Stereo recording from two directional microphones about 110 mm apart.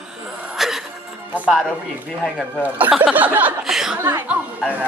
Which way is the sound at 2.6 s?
15° right (ahead or behind).